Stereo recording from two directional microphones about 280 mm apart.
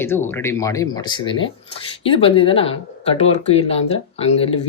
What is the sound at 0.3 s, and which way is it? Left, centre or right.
Speech, centre.